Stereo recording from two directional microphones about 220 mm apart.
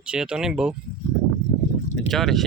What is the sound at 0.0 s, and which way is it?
Speech, 5° right (ahead or behind).